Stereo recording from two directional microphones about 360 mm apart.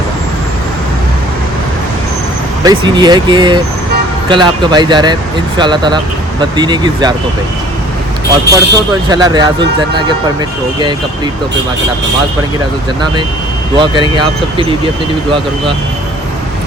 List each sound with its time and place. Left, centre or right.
2.6 s speech: centre
8.4 s speech: right
9.0 s speech: centre
13.7 s speech: centre